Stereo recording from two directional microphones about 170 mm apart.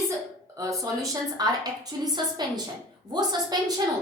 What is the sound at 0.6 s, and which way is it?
A woman's voice, 20° right (ahead or behind).